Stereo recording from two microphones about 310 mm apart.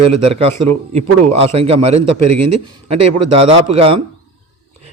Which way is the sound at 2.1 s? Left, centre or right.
Right.